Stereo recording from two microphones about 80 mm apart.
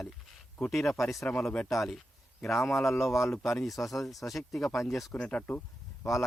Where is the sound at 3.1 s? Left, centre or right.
Left.